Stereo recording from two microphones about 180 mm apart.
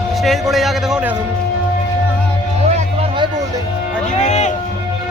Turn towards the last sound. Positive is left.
turn(degrees=40)  # may be behind; listen again after turning